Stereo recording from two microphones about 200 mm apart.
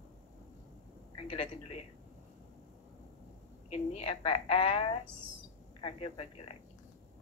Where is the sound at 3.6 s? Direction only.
30° left (ahead or behind).